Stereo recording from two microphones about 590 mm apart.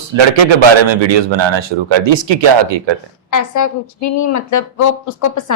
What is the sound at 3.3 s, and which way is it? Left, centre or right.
A woman's voice, left.